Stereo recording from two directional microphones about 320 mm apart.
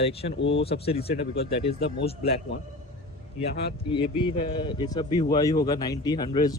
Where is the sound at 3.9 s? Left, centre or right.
Centre.